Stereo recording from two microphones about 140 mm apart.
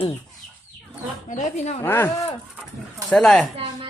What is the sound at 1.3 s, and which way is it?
Speech, 60° left (ahead or behind).